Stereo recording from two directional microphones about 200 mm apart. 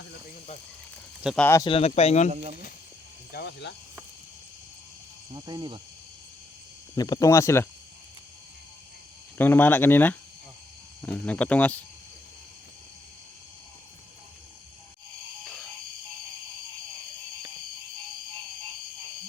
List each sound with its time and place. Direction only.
1.2 s speech: centre (ahead or behind)
1.5 s speech: 15° left (ahead or behind)
1.7 s speech: 30° left (ahead or behind)
3.3 s speech: 55° left (ahead or behind)
5.3 s speech: 20° right (ahead or behind)
6.9 s speech: 20° left (ahead or behind)
9.4 s speech: 10° left (ahead or behind)